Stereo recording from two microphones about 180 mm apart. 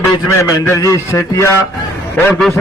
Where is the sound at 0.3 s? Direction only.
15° left (ahead or behind).